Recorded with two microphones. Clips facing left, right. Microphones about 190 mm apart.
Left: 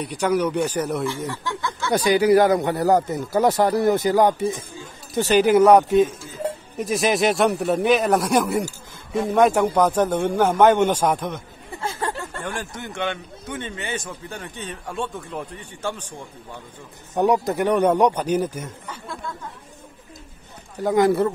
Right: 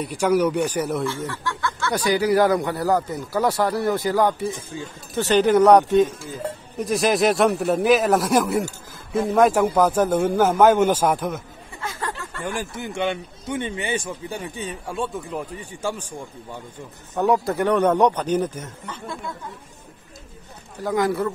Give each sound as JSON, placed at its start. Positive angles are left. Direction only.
{"t": 0.0, "sound": "a man's voice", "side_deg": -10}
{"t": 1.0, "sound": "a man's voice", "side_deg": 15}
{"t": 11.8, "sound": "a sound", "side_deg": 30}
{"t": 12.5, "sound": "a man's voice", "side_deg": -10}
{"t": 17.1, "sound": "speech", "side_deg": 15}
{"t": 20.8, "sound": "speech", "side_deg": 25}